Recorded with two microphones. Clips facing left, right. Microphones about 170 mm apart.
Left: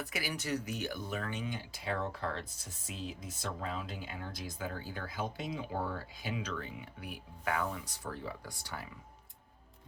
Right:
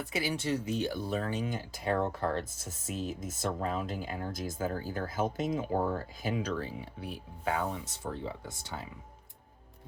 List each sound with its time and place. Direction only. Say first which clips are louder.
0.0 s speech: right 6 dB; 25° right (ahead or behind)